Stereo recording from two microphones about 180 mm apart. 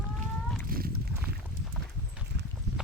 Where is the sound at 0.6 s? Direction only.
55° right (ahead or behind).